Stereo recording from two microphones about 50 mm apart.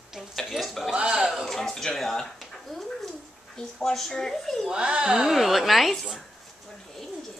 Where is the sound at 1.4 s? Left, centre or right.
Centre.